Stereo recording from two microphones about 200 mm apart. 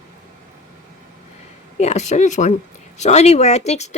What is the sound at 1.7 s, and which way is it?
Speech, 35° left (ahead or behind).